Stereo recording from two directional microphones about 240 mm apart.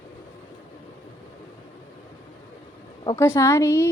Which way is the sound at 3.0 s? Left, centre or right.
Centre.